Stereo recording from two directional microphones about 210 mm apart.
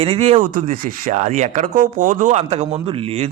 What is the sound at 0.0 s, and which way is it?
Speech, 30° right (ahead or behind).